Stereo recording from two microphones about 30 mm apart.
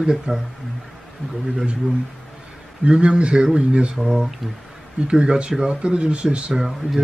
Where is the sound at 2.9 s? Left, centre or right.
Right.